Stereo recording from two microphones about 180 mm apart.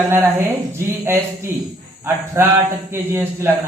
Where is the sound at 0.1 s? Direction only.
15° right (ahead or behind).